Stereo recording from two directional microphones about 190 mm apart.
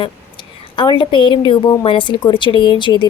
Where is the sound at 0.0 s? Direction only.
25° left (ahead or behind).